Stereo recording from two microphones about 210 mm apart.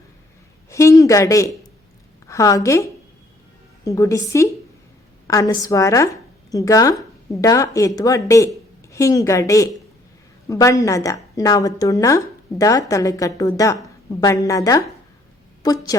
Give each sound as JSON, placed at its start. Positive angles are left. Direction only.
{"t": 0.7, "sound": "a woman's voice", "side_deg": 15}